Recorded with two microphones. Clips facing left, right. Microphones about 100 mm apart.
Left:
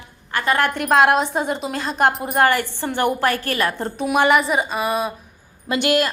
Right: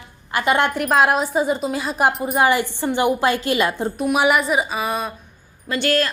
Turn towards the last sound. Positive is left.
turn(degrees=15)  # may be behind; listen again after turning